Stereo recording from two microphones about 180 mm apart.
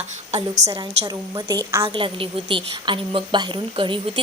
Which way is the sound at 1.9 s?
30° right (ahead or behind).